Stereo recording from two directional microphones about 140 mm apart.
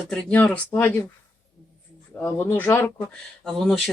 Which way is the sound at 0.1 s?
5° left (ahead or behind).